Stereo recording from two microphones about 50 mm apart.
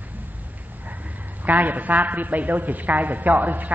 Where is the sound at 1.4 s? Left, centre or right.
Right.